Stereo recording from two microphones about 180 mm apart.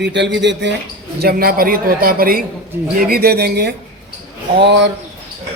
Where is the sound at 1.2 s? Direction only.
55° right (ahead or behind).